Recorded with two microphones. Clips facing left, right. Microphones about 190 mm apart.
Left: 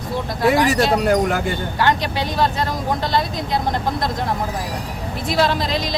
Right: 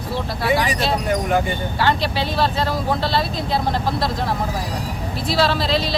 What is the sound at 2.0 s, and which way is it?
Speech, 15° left (ahead or behind).